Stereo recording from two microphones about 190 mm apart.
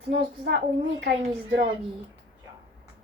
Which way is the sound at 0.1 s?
65° right (ahead or behind).